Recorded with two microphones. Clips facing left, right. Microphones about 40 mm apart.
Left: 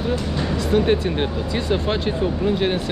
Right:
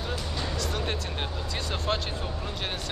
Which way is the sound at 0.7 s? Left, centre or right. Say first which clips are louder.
Left 13 dB; left.